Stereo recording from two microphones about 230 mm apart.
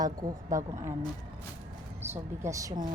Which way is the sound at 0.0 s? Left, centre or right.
Centre.